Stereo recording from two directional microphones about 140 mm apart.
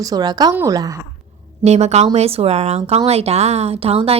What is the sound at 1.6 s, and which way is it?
A woman's voice, 50° right (ahead or behind).